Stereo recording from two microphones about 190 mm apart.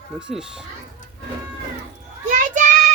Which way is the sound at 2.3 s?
40° right (ahead or behind).